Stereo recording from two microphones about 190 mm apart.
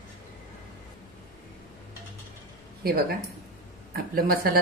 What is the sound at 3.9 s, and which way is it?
Speech, 50° right (ahead or behind).